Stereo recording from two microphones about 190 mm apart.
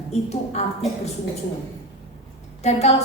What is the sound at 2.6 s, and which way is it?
Speech, 35° left (ahead or behind).